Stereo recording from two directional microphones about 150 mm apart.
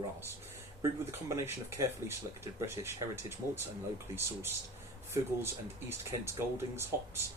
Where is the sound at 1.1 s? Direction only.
15° right (ahead or behind).